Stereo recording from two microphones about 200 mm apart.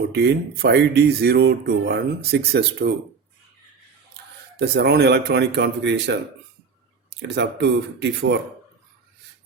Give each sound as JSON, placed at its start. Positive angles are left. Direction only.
{"t": 0.1, "sound": "speech", "side_deg": -55}
{"t": 4.5, "sound": "speech", "side_deg": -55}